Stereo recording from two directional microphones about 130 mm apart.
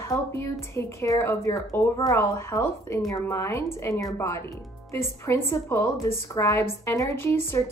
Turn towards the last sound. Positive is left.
turn(degrees=20)  # may be behind; listen again after turning